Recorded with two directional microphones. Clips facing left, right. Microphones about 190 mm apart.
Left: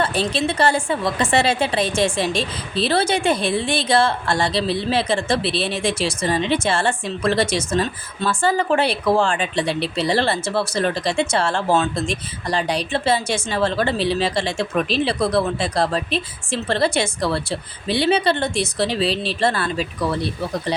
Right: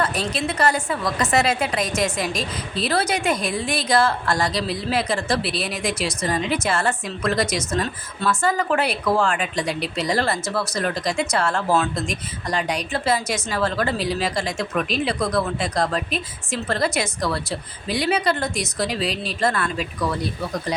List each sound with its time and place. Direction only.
0.0 s a woman's voice: 30° left (ahead or behind)